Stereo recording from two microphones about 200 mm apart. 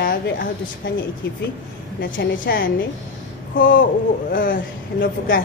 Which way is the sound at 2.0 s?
50° left (ahead or behind).